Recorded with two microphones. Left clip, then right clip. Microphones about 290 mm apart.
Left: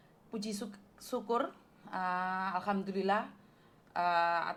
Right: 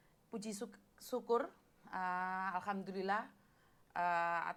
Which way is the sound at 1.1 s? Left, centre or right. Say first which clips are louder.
Left 3 dB; right.